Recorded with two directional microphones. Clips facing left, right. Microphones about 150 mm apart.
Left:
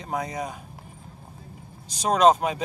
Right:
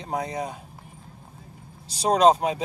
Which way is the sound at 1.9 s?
30° right (ahead or behind).